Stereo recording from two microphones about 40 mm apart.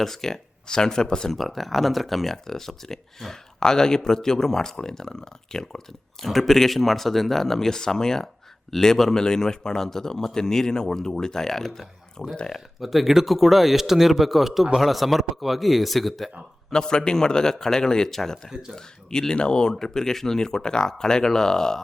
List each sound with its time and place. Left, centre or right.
0.0 s speech: centre
1.3 s speech: centre
6.2 s speech: centre
16.7 s speech: centre
19.1 s speech: centre